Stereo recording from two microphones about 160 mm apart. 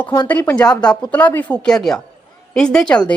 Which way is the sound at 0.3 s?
10° left (ahead or behind).